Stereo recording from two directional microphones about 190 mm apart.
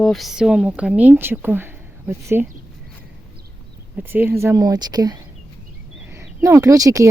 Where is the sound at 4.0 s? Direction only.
10° right (ahead or behind).